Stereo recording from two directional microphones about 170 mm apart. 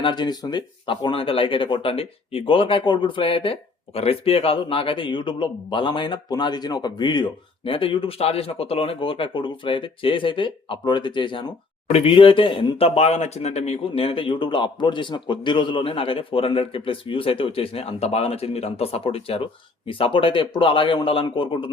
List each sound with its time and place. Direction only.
0.0 s speech: 25° left (ahead or behind)